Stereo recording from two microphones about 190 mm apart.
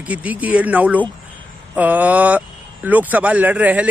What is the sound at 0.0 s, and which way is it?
A man's voice, 10° right (ahead or behind).